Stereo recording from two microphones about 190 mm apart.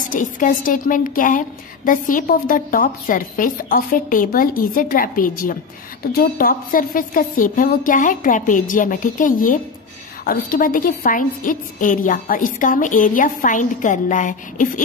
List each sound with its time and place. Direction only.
0.0 s a woman's voice: 40° left (ahead or behind)